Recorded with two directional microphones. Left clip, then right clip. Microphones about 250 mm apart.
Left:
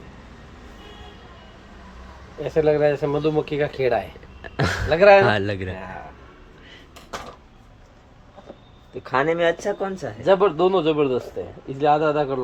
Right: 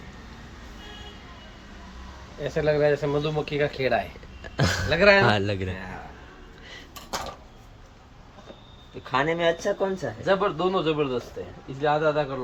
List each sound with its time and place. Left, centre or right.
2.4 s speech: left
4.4 s a sound: centre
4.9 s speech: left
5.2 s a man's voice: centre
9.0 s a man's voice: centre
10.2 s speech: left